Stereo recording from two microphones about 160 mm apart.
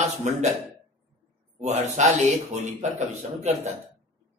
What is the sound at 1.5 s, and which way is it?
A man's voice, 45° right (ahead or behind).